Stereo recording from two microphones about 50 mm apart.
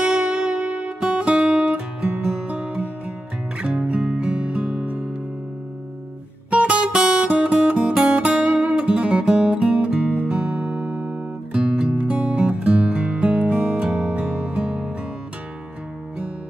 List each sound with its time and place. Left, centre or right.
0.0 s music: right
0.8 s music: centre
6.5 s music: right
10.6 s music: right
11.5 s music: centre